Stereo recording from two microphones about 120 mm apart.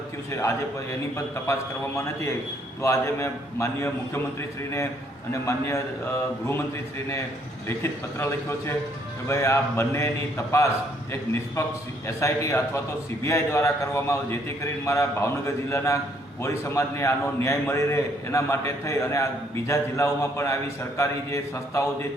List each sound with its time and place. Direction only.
2.8 s a man's voice: 25° left (ahead or behind)
5.3 s a man's voice: 25° left (ahead or behind)
7.8 s a man's voice: 20° left (ahead or behind)